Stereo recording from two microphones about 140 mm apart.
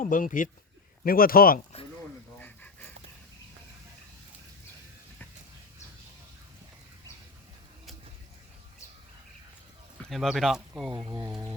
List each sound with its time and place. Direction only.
0.0 s speech: 75° left (ahead or behind)
1.0 s speech: 90° left
2.4 s pant: 15° left (ahead or behind)
10.0 s speech: centre (ahead or behind)